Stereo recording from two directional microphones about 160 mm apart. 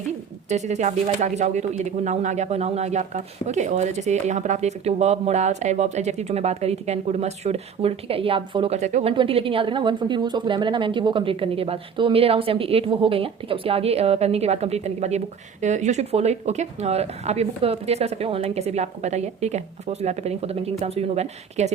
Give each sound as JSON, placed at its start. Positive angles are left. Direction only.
{"t": 0.4, "sound": "speech", "side_deg": -45}
{"t": 9.1, "sound": "a woman's voice", "side_deg": -35}